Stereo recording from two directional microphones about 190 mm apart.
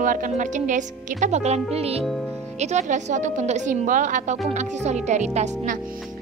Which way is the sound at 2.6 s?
35° right (ahead or behind).